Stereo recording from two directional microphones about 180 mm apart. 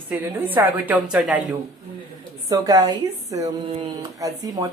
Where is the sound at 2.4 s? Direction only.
20° right (ahead or behind).